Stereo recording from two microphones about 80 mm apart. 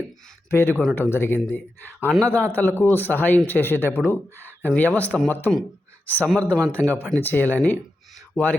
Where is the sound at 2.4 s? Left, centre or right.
Left.